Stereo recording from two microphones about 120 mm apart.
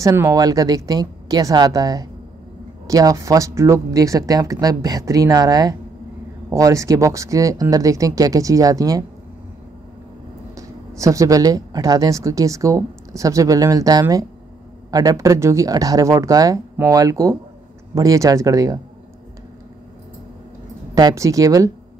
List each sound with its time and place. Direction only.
0.0 s speech: 25° right (ahead or behind)
10.5 s speech: 25° right (ahead or behind)
20.9 s speech: 25° right (ahead or behind)